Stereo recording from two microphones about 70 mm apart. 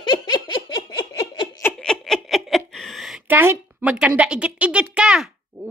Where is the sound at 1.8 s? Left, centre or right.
Centre.